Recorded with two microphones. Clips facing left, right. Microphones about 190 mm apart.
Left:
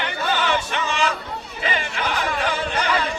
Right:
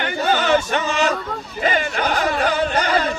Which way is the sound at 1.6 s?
45° right (ahead or behind).